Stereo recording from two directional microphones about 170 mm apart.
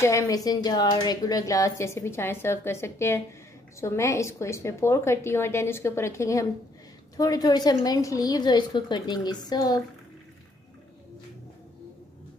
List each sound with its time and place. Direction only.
0.0 s a woman's voice: 15° left (ahead or behind)